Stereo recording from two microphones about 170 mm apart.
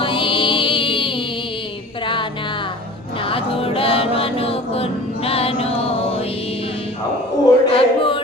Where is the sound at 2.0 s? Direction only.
30° left (ahead or behind).